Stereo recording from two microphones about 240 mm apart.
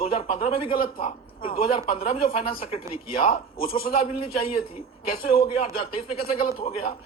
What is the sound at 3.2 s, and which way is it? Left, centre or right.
Speech, left.